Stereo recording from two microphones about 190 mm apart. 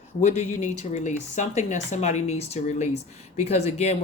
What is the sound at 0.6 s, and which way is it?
Speech, 40° left (ahead or behind).